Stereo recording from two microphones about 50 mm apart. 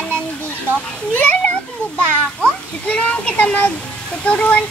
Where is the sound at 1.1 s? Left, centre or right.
Left.